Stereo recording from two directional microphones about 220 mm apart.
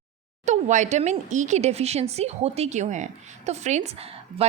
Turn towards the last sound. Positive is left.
turn(degrees=-30)  # may be behind; listen again after turning